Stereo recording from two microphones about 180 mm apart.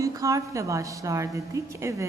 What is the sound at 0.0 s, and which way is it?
A woman's voice, 20° right (ahead or behind).